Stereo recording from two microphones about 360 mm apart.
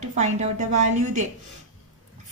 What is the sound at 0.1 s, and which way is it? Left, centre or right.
Speech, centre.